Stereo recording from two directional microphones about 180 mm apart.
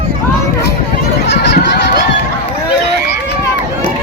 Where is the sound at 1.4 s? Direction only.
70° left (ahead or behind).